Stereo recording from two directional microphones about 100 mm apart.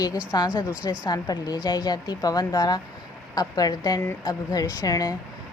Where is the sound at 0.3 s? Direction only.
40° left (ahead or behind).